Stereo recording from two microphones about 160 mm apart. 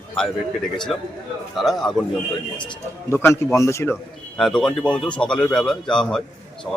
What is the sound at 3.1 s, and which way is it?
Speech, 15° left (ahead or behind).